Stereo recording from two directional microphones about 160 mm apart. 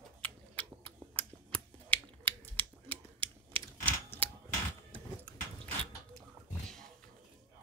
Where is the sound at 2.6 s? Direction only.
35° right (ahead or behind).